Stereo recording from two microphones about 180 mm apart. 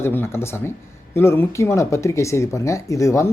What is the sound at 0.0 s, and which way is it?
Speech, 15° left (ahead or behind).